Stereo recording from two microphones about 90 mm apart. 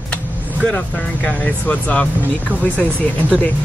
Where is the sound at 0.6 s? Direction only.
15° left (ahead or behind).